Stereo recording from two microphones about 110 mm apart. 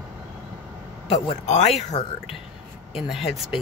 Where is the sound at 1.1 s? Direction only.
75° left (ahead or behind).